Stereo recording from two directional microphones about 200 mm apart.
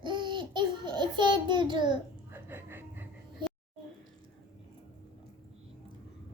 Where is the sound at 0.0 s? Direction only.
25° right (ahead or behind).